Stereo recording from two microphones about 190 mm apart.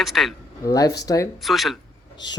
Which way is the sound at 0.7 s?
20° left (ahead or behind).